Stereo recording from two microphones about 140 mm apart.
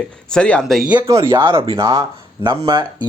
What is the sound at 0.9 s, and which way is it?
Speech, 25° right (ahead or behind).